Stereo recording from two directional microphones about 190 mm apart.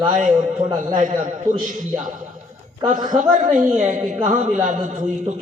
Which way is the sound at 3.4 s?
45° right (ahead or behind).